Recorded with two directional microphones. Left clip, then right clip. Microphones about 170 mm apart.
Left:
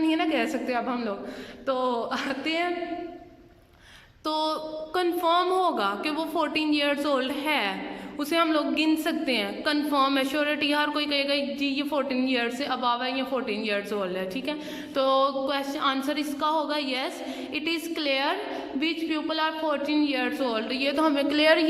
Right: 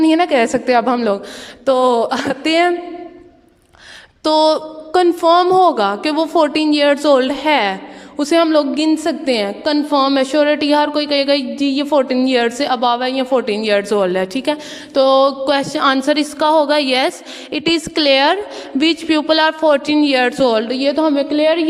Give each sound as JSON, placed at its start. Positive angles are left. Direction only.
{"t": 0.0, "sound": "a woman's voice", "side_deg": -40}
{"t": 4.2, "sound": "a woman's voice", "side_deg": -45}